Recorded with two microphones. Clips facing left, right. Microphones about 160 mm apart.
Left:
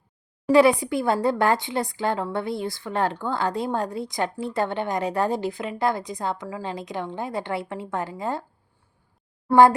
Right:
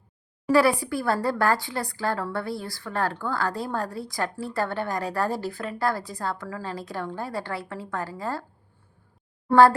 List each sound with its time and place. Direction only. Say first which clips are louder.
0.5 s speech: left 4 dB; 20° left (ahead or behind)
9.5 s speech: left 1 dB; 15° left (ahead or behind)